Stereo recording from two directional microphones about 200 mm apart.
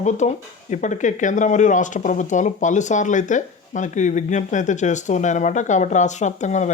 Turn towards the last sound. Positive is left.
turn(degrees=35)  # may be behind; listen again after turning